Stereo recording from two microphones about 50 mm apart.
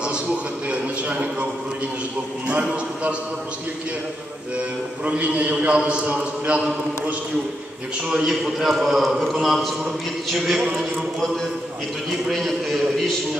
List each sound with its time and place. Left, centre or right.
0.0 s a man's voice: right
5.0 s a man's voice: right; by 10.6 s centre
12.3 s a man's voice: centre